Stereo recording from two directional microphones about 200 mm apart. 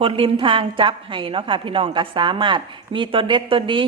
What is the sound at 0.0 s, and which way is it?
A woman's voice, 25° right (ahead or behind).